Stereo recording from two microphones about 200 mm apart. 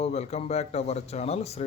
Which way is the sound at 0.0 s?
30° left (ahead or behind).